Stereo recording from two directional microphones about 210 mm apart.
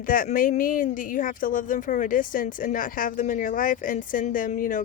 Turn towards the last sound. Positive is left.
turn(degrees=40)  # may be behind; listen again after turning